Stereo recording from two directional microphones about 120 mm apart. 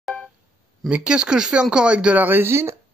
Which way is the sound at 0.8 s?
10° right (ahead or behind).